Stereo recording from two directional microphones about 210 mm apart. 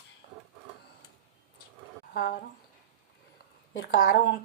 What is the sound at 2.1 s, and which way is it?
Speech, 45° left (ahead or behind).